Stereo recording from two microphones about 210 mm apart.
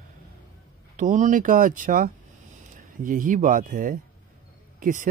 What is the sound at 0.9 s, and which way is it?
A man's voice, 35° right (ahead or behind).